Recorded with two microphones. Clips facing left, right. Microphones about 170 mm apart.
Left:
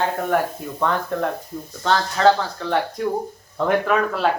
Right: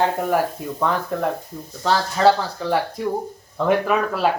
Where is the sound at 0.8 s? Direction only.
5° right (ahead or behind).